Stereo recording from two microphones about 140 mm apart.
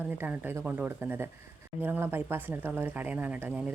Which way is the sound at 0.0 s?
10° right (ahead or behind).